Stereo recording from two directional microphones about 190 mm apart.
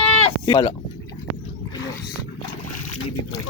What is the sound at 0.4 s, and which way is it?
Speech, 25° left (ahead or behind).